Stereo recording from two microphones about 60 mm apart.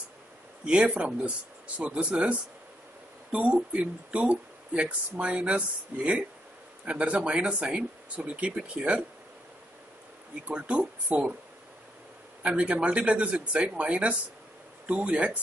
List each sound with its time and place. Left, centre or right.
0.7 s speech: centre
10.5 s speech: centre
12.4 s speech: centre